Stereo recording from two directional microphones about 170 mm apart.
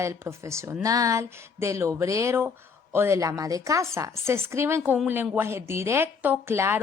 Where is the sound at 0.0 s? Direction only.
15° right (ahead or behind).